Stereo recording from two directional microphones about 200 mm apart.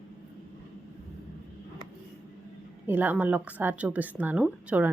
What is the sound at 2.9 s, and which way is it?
Speech, 10° right (ahead or behind).